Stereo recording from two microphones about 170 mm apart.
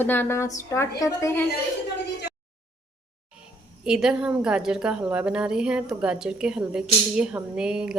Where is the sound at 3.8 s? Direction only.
5° right (ahead or behind).